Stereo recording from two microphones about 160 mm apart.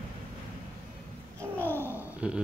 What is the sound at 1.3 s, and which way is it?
Babbling, 15° right (ahead or behind).